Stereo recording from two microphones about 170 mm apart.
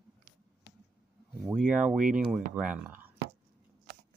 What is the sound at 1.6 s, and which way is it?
Speech, 5° right (ahead or behind).